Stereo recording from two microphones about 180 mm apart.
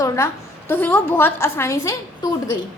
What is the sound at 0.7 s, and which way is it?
A woman's voice, 10° left (ahead or behind).